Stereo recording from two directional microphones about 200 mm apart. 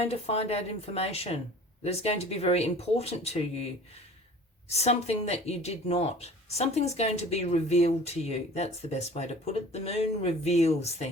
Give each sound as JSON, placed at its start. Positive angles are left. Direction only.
{"t": 0.0, "sound": "speech", "side_deg": 30}
{"t": 4.7, "sound": "speech", "side_deg": 30}